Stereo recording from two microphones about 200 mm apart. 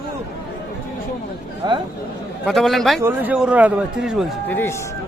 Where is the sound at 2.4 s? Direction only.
Centre (ahead or behind).